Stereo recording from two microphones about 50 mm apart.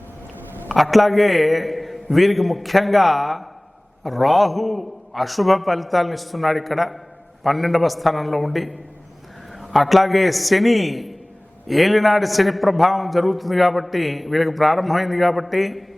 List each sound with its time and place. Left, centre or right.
0.8 s a man's voice: centre